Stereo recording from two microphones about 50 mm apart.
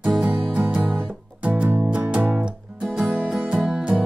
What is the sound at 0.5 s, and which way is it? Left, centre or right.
Music, right.